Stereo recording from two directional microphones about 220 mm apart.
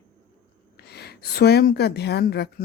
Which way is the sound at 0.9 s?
45° left (ahead or behind).